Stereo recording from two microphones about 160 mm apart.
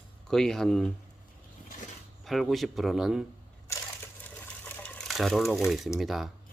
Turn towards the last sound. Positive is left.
turn(degrees=0)  # may be behind; listen again after turning